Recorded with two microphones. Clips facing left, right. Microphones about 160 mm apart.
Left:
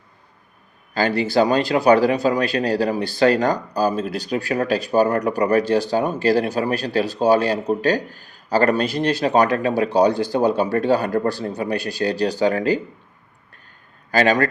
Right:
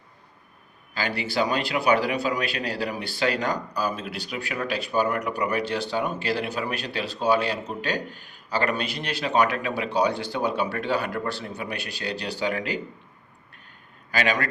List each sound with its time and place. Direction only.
0.9 s speech: 45° left (ahead or behind)
14.1 s a man's voice: 45° left (ahead or behind)